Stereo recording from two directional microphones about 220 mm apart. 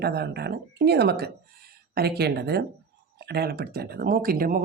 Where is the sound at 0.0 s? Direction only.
45° right (ahead or behind).